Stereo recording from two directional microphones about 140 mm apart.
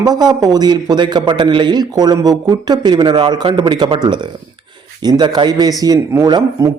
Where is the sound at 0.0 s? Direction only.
30° right (ahead or behind).